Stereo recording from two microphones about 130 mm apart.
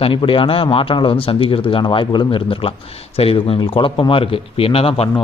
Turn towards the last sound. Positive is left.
turn(degrees=45)  # may be behind; listen again after turning